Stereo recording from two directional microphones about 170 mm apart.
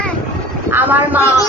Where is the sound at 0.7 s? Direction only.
10° right (ahead or behind).